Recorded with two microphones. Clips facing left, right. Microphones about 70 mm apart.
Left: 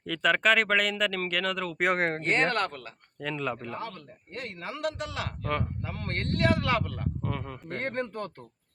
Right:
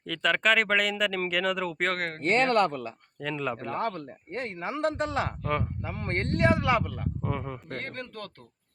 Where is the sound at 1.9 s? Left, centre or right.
Left.